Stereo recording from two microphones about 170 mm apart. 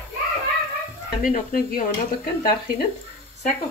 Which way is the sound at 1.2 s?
55° left (ahead or behind).